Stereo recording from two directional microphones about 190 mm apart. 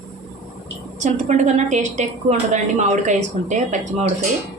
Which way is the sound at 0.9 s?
40° right (ahead or behind).